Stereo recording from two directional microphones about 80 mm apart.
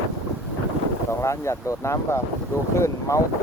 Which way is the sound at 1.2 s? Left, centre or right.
Left.